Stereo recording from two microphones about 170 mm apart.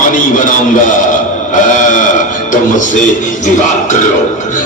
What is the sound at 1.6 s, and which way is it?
Chant, 50° left (ahead or behind).